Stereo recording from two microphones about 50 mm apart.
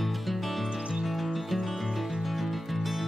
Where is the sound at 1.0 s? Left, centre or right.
Centre.